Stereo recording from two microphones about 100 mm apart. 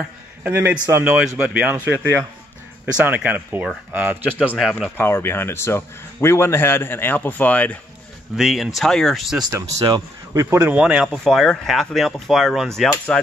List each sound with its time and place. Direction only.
0.4 s a man's voice: 20° right (ahead or behind)
4.6 s speech: centre (ahead or behind)
4.9 s speech: 25° left (ahead or behind)
8.4 s speech: 5° right (ahead or behind)
9.5 s speech: 30° right (ahead or behind)
10.5 s speech: 15° right (ahead or behind)
11.1 s speech: 5° left (ahead or behind)
12.9 s speech: 15° left (ahead or behind)